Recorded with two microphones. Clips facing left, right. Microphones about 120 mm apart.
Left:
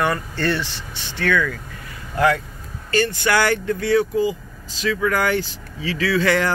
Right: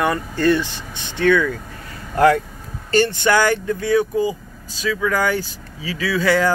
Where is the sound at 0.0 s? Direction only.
15° right (ahead or behind).